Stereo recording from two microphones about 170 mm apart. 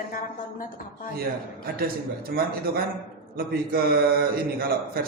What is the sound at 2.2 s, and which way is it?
A man's voice, 60° right (ahead or behind).